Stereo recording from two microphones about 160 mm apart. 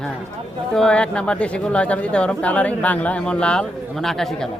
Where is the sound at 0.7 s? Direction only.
5° left (ahead or behind).